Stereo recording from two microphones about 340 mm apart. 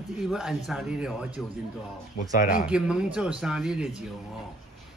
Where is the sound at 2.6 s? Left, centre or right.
Centre.